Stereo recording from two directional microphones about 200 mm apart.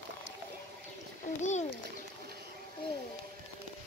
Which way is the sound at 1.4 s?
35° left (ahead or behind).